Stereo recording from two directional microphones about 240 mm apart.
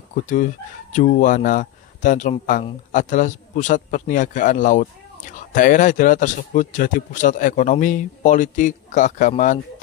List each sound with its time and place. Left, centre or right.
0.1 s speech: left